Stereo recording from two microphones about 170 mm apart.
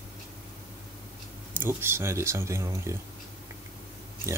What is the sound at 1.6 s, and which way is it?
Speech, 15° right (ahead or behind).